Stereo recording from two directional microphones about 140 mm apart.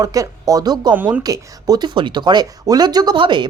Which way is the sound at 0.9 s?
10° right (ahead or behind).